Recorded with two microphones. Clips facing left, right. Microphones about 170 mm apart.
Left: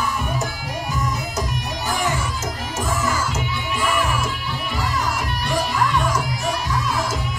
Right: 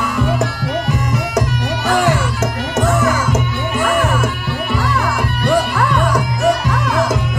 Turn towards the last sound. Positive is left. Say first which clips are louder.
# right 9 dB
turn(degrees=-65)  # may be behind; listen again after turning